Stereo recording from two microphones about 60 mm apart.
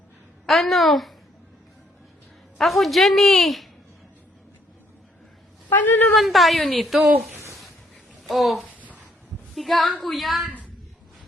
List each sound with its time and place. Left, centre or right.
0.4 s a woman's voice: centre
2.6 s a woman's voice: centre
5.7 s speech: left
6.1 s a woman's voice: centre
8.2 s a child's voice: centre
8.7 s a sound: right
9.6 s a woman's voice: centre